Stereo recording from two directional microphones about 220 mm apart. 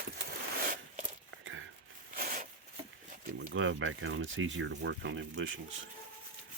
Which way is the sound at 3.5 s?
60° right (ahead or behind).